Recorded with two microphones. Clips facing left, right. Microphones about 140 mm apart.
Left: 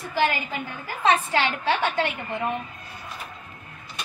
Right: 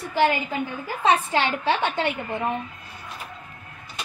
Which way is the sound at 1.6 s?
20° right (ahead or behind).